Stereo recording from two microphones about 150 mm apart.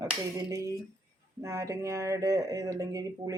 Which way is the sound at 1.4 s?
20° right (ahead or behind).